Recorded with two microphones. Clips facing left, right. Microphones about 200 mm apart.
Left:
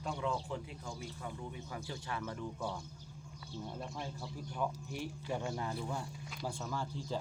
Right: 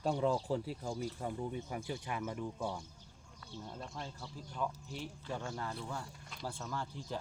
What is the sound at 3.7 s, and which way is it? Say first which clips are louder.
Speech: left 1 dB; 10° left (ahead or behind).